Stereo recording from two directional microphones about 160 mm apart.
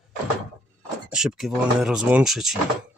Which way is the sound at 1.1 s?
5° right (ahead or behind).